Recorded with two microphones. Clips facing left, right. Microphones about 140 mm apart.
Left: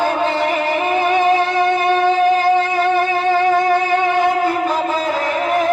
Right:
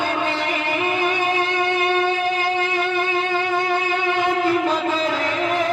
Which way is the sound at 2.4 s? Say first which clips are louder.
Left 7 dB; 45° left (ahead or behind).